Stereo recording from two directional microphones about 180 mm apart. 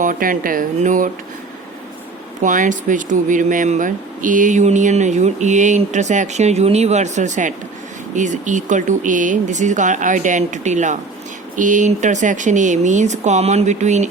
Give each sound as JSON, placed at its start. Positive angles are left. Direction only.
{"t": 0.0, "sound": "speech", "side_deg": -50}
{"t": 2.4, "sound": "speech", "side_deg": -45}